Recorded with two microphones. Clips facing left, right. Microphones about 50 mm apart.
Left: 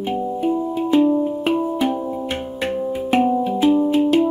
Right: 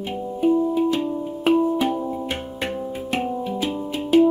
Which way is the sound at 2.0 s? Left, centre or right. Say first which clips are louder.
Left 2 dB; centre.